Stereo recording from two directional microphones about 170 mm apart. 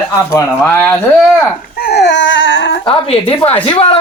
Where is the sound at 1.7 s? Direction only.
70° left (ahead or behind); by 2.8 s 90° left.